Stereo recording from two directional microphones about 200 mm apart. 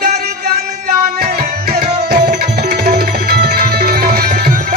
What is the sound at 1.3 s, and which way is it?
Tabla, 50° right (ahead or behind).